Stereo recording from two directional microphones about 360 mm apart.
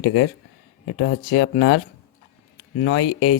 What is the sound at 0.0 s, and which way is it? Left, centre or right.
A man's voice, left.